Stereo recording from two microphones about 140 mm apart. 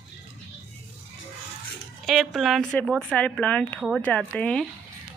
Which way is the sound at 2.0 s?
Centre (ahead or behind).